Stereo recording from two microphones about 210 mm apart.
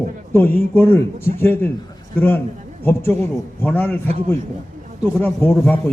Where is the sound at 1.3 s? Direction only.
10° left (ahead or behind).